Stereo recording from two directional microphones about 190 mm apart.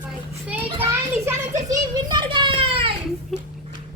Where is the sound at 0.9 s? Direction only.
15° right (ahead or behind); by 2.9 s 30° right (ahead or behind).